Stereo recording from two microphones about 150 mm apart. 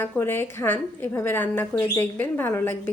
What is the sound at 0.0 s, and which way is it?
A woman's voice, 15° left (ahead or behind).